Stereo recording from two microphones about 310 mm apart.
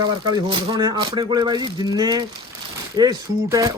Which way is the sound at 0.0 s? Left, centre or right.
Centre.